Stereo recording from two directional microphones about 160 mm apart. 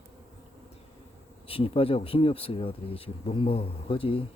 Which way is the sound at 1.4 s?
35° left (ahead or behind).